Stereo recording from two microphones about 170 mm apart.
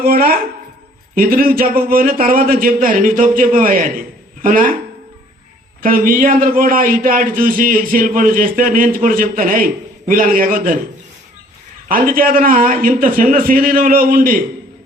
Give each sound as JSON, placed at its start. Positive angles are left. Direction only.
{"t": 0.0, "sound": "a man's voice", "side_deg": -60}
{"t": 5.8, "sound": "a man's voice", "side_deg": -55}
{"t": 11.9, "sound": "a man's voice", "side_deg": -55}